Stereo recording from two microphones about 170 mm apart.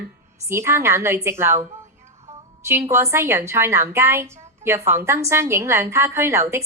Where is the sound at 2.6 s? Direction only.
15° right (ahead or behind).